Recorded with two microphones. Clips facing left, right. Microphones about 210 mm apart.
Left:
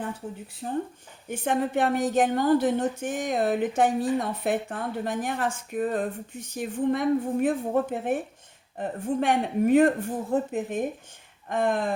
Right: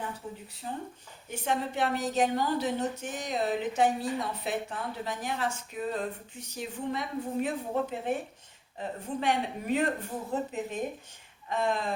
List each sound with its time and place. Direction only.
0.6 s a woman's voice: 50° left (ahead or behind)